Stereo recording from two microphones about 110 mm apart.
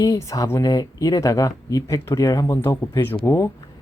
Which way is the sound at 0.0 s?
30° left (ahead or behind).